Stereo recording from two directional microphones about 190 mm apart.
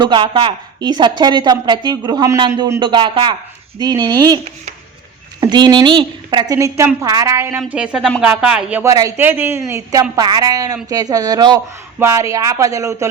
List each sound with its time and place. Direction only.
0.0 s speech: 25° right (ahead or behind)
5.4 s speech: 20° right (ahead or behind); by 8.9 s 5° right (ahead or behind)
8.9 s speech: 15° right (ahead or behind)